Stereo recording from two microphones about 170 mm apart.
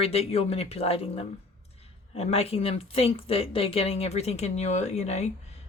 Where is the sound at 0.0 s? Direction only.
35° left (ahead or behind).